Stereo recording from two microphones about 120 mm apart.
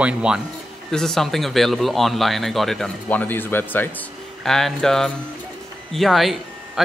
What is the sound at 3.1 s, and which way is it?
Speech, 15° left (ahead or behind).